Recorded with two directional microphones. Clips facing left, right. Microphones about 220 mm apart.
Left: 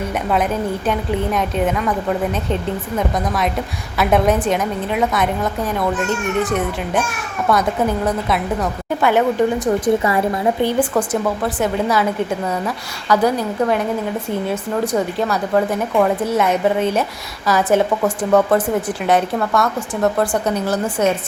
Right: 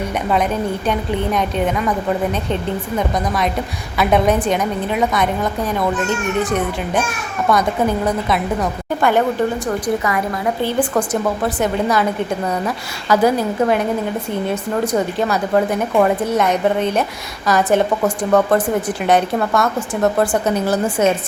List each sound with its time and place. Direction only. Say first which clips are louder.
0.9 s a woman's voice: even; 5° left (ahead or behind)
9.8 s speech: left 3 dB; 30° left (ahead or behind)
10.6 s a woman's voice: right 1 dB; 10° left (ahead or behind); by 21.1 s 5° right (ahead or behind)